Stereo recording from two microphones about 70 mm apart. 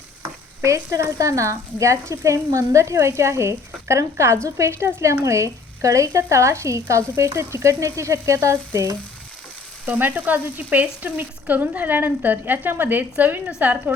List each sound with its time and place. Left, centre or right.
0.6 s speech: right
9.8 s speech: right